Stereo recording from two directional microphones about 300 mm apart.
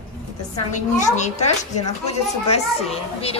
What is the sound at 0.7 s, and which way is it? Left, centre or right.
Speech, left.